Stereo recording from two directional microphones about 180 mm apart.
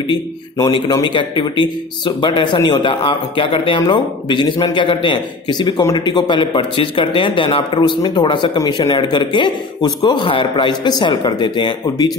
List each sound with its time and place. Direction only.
0.1 s speech: 25° left (ahead or behind)